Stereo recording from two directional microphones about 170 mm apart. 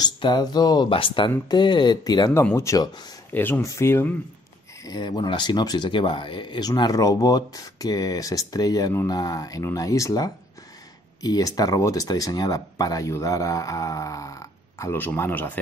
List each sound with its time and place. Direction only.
0.0 s speech: 25° left (ahead or behind)